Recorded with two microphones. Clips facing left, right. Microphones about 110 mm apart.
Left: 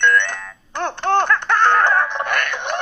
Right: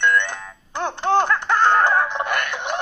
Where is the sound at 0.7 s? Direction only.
10° right (ahead or behind).